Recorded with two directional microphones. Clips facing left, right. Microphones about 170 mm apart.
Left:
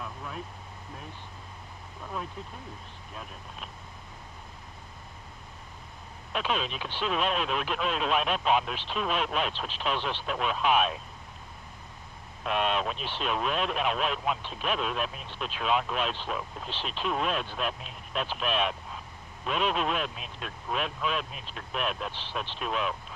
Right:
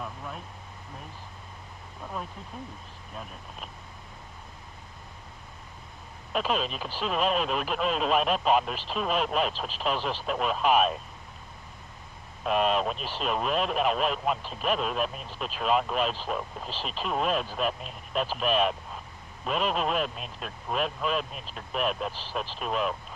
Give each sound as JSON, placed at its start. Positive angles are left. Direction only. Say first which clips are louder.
{"t": 6.3, "sound": "speech", "louder": "right 3 dB", "side_deg": 0}
{"t": 12.5, "sound": "speech", "louder": "right 3 dB", "side_deg": 0}